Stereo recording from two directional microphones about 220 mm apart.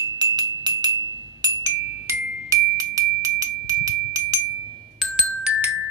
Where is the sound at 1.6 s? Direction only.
15° right (ahead or behind).